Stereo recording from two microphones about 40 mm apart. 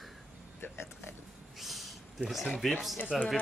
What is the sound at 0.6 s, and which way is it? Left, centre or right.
Speech, left.